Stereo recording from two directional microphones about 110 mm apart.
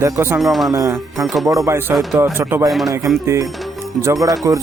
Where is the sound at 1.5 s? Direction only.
30° right (ahead or behind).